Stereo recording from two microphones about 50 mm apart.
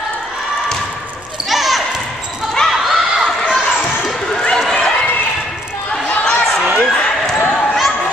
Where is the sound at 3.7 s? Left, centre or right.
Centre.